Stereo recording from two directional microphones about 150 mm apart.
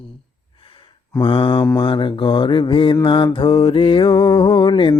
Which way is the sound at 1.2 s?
35° left (ahead or behind).